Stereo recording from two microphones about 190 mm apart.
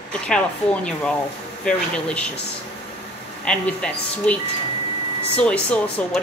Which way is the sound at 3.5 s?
5° left (ahead or behind).